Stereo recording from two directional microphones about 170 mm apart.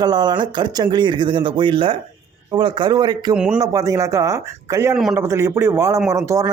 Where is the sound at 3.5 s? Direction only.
20° right (ahead or behind).